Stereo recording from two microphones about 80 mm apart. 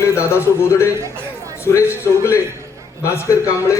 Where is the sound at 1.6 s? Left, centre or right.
Left.